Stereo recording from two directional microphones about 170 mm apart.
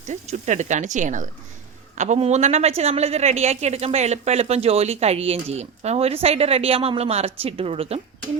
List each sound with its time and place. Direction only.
0.0 s a woman's voice: 45° right (ahead or behind)